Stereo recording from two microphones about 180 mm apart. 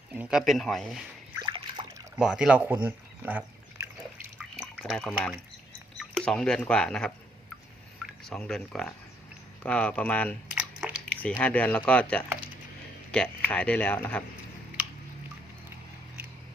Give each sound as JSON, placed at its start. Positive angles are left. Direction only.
{"t": 0.1, "sound": "speech", "side_deg": -5}
{"t": 1.4, "sound": "water", "side_deg": -25}
{"t": 2.1, "sound": "speech", "side_deg": -5}
{"t": 4.4, "sound": "drip", "side_deg": 0}
{"t": 6.0, "sound": "speech", "side_deg": 5}
{"t": 8.3, "sound": "speech", "side_deg": 5}
{"t": 10.5, "sound": "a sound", "side_deg": -5}
{"t": 11.2, "sound": "speech", "side_deg": 5}